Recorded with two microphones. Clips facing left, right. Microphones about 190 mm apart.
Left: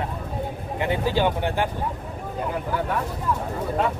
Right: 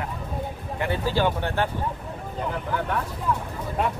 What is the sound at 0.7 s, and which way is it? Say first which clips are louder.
Speech: left 2 dB; 15° left (ahead or behind).